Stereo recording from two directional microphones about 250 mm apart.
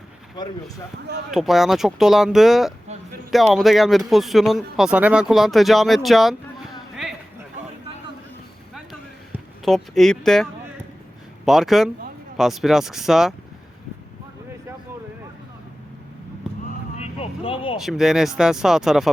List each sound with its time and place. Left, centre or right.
1.3 s speech: centre
8.7 s a sound: centre
11.4 s speech: centre
17.0 s vehicle: left
17.7 s speech: centre